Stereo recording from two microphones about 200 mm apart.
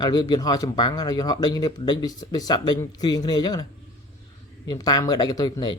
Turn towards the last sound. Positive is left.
turn(degrees=20)  # may be behind; listen again after turning